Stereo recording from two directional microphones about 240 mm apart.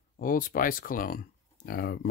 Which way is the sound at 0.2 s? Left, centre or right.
Left.